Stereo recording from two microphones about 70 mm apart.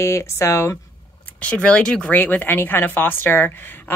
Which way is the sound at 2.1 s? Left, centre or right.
Left.